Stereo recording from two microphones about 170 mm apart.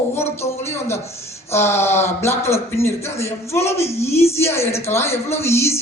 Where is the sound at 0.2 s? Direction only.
15° left (ahead or behind).